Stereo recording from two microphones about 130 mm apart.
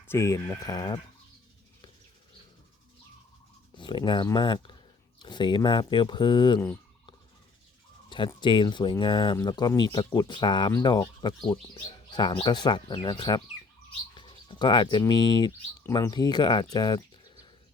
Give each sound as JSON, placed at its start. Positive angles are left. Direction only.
{"t": 0.1, "sound": "speech", "side_deg": 20}
{"t": 3.8, "sound": "speech", "side_deg": 40}
{"t": 8.4, "sound": "speech", "side_deg": 35}
{"t": 16.7, "sound": "bird", "side_deg": 35}